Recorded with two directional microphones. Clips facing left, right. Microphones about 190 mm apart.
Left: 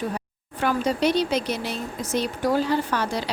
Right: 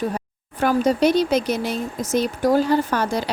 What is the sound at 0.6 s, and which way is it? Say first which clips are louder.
A woman's voice: right 5 dB; 45° right (ahead or behind).